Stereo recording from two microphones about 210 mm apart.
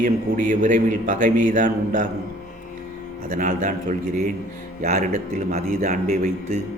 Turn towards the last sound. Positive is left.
turn(degrees=-40)  # may be behind; listen again after turning